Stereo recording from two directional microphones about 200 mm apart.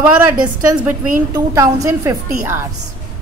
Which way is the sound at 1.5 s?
15° right (ahead or behind).